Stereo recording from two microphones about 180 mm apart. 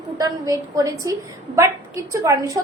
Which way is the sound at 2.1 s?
20° right (ahead or behind).